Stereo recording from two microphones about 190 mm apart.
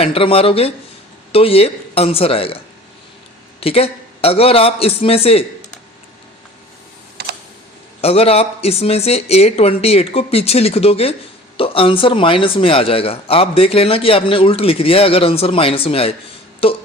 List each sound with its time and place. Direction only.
0.0 s speech: 30° left (ahead or behind)
3.6 s speech: 30° left (ahead or behind)
8.0 s a man's voice: 30° left (ahead or behind)